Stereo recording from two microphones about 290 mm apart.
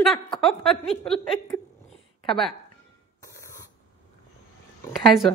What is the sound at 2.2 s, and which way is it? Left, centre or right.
Speech, centre.